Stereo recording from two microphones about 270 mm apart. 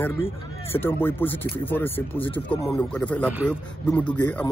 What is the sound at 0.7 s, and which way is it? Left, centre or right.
A man's voice, centre.